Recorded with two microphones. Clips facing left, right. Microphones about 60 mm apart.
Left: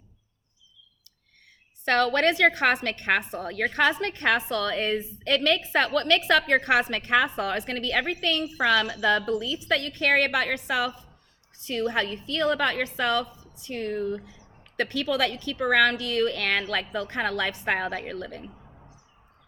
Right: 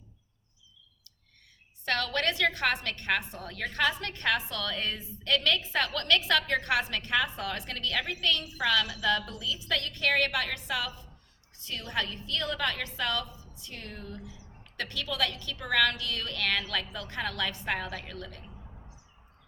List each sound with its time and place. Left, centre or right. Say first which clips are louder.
1.8 s speech: left 8 dB; left